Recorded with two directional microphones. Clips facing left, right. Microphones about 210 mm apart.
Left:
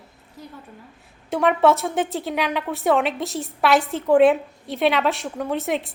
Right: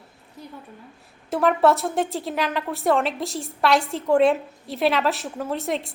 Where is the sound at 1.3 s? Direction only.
Centre (ahead or behind).